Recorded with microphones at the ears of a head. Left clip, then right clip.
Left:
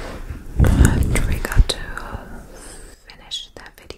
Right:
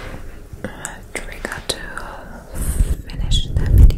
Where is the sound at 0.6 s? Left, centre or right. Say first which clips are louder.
Left 10 dB; left.